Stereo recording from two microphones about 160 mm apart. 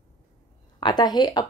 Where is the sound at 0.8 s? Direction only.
25° left (ahead or behind).